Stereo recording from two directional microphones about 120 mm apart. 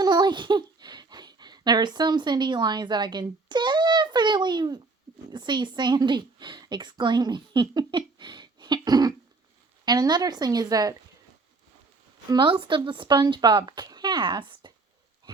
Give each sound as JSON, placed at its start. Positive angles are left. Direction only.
{"t": 0.0, "sound": "babbling", "side_deg": -35}
{"t": 5.3, "sound": "a woman's voice", "side_deg": -40}
{"t": 12.3, "sound": "speech", "side_deg": -45}